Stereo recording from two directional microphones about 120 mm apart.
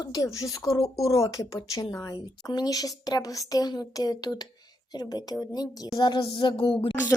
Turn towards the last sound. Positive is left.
turn(degrees=45)  # may be behind; listen again after turning